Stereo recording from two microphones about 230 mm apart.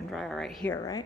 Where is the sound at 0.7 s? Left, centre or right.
Centre.